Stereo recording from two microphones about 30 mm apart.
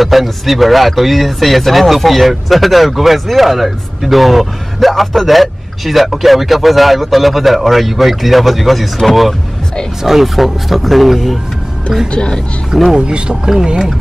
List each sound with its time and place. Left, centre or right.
0.0 s speech: centre
12.1 s speech: left
12.9 s speech: right
13.3 s speech: centre